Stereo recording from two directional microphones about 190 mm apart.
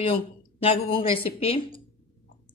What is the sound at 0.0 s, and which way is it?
Speech, 30° left (ahead or behind).